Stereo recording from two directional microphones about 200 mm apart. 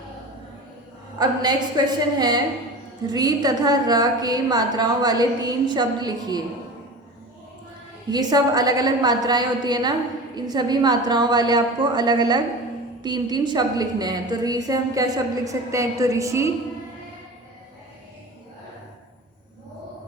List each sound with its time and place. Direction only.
1.2 s a woman's voice: 20° right (ahead or behind)
8.1 s a woman's voice: 20° right (ahead or behind)